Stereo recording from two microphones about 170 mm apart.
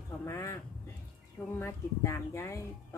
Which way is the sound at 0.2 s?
15° left (ahead or behind).